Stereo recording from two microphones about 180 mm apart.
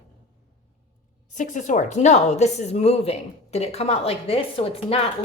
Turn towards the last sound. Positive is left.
turn(degrees=30)  # may be behind; listen again after turning